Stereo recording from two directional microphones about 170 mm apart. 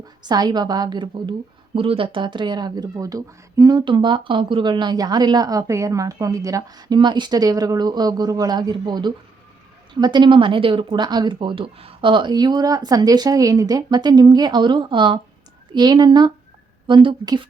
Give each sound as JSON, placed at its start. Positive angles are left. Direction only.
{"t": 0.2, "sound": "a woman's voice", "side_deg": -25}